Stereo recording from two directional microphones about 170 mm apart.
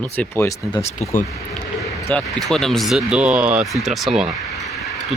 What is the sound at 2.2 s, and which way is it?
Speech, centre (ahead or behind).